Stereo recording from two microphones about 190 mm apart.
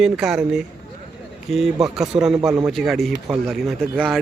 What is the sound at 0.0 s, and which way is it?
Speech, 5° right (ahead or behind).